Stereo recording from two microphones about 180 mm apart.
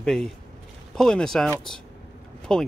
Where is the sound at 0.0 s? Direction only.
5° left (ahead or behind).